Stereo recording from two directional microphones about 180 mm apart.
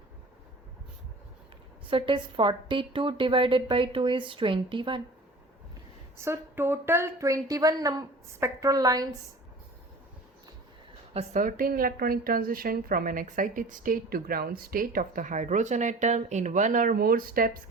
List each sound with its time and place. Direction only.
1.9 s a woman's voice: 30° right (ahead or behind)
6.1 s a woman's voice: 15° right (ahead or behind)
11.1 s a woman's voice: 40° right (ahead or behind)